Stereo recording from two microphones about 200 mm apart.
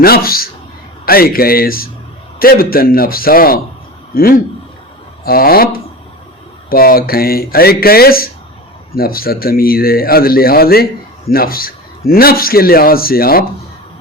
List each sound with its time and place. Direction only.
0.0 s a man's voice: 50° left (ahead or behind)